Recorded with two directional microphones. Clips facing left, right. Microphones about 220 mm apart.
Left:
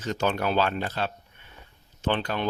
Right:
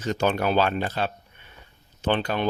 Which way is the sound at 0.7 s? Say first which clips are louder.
Right 3 dB; 15° right (ahead or behind).